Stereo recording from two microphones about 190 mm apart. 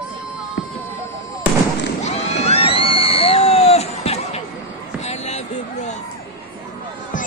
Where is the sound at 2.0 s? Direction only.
35° left (ahead or behind).